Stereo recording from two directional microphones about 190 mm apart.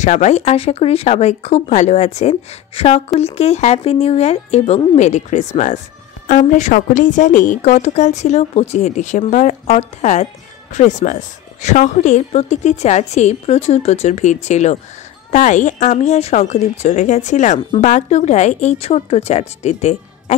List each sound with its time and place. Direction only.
0.0 s speech: 35° left (ahead or behind)